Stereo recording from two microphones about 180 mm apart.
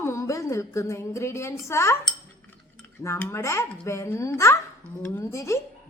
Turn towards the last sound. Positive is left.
turn(degrees=15)  # may be behind; listen again after turning